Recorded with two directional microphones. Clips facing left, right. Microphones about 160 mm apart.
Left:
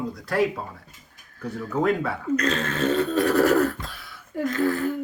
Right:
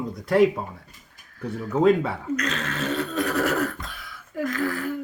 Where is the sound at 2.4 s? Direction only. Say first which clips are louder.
Left 4 dB; 30° left (ahead or behind).